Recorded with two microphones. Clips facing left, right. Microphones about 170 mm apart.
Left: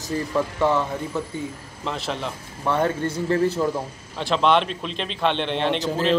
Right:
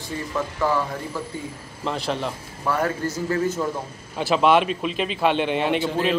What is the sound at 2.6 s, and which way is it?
Speech, 25° left (ahead or behind).